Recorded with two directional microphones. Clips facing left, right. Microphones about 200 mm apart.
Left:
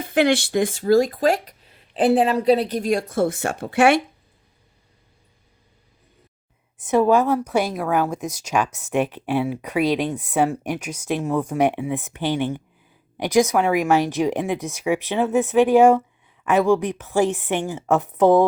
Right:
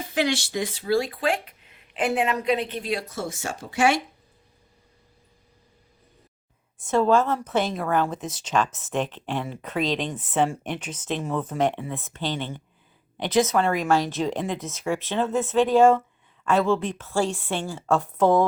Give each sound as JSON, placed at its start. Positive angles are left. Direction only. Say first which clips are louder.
{"t": 0.0, "sound": "speech", "louder": "left 6 dB", "side_deg": 55}
{"t": 6.7, "sound": "speech", "louder": "left 3 dB", "side_deg": 20}